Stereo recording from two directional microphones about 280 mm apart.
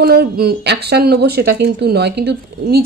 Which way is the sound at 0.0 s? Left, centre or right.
Right.